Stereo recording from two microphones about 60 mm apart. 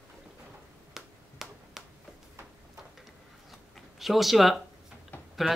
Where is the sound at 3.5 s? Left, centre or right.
Centre.